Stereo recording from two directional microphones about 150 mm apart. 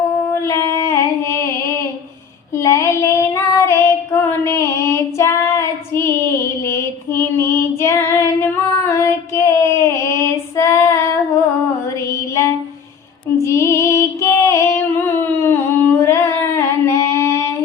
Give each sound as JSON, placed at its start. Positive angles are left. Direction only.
{"t": 0.4, "sound": "a sound", "side_deg": 20}
{"t": 2.6, "sound": "child singing", "side_deg": 20}
{"t": 8.9, "sound": "female singing", "side_deg": 20}
{"t": 13.4, "sound": "music", "side_deg": 20}